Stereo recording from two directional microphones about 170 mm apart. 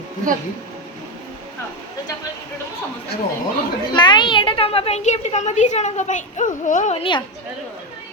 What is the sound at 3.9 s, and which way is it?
A child's voice, 25° left (ahead or behind).